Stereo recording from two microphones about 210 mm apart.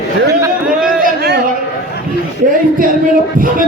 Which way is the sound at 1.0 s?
50° right (ahead or behind).